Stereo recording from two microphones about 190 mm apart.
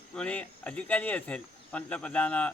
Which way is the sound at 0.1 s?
5° left (ahead or behind).